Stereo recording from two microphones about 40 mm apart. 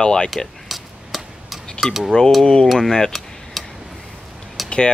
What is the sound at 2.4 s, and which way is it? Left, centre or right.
Speech, centre.